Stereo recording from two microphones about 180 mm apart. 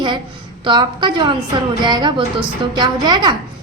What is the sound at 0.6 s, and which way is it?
A woman's voice, 25° right (ahead or behind).